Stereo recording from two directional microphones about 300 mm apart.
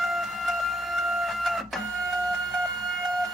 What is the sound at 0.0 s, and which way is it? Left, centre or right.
Printer, centre.